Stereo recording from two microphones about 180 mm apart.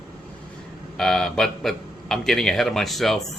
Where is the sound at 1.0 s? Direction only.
5° left (ahead or behind).